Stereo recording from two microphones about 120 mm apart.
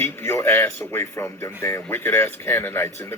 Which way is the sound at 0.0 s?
20° left (ahead or behind).